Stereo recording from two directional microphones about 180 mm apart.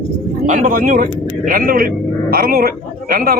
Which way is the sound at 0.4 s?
45° right (ahead or behind).